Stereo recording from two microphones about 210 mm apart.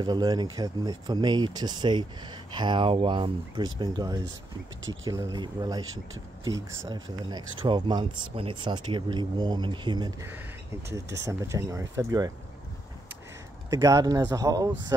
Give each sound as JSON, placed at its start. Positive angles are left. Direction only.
{"t": 0.0, "sound": "speech", "side_deg": -20}
{"t": 13.7, "sound": "speech", "side_deg": -15}